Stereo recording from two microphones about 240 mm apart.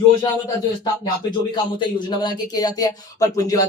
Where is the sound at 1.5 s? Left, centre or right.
Centre.